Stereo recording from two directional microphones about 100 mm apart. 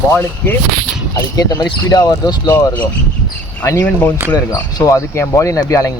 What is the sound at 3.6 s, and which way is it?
Speech, 30° left (ahead or behind).